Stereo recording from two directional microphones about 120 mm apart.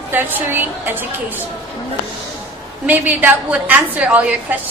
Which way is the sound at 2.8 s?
15° right (ahead or behind).